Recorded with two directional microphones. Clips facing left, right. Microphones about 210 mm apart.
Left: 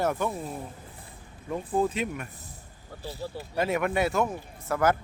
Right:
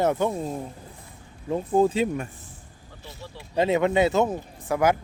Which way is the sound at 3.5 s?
20° right (ahead or behind).